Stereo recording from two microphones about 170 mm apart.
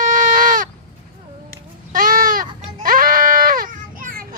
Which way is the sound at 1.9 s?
55° right (ahead or behind).